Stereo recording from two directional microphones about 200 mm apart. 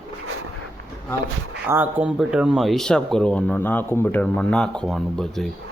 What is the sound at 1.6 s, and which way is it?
Speech, 10° right (ahead or behind).